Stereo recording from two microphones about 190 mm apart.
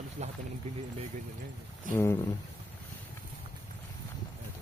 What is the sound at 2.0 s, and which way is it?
Speech, 15° left (ahead or behind).